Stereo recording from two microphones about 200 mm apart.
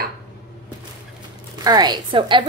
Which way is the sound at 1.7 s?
20° right (ahead or behind).